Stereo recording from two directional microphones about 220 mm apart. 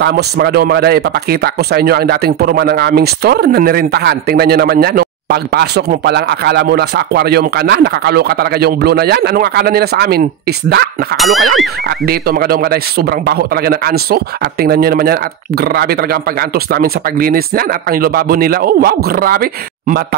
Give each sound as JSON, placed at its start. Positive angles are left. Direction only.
{"t": 0.0, "sound": "speech", "side_deg": -45}
{"t": 11.1, "sound": "speech", "side_deg": 0}
{"t": 12.1, "sound": "speech", "side_deg": -45}